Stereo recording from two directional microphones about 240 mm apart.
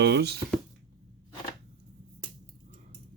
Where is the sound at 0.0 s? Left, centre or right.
Right.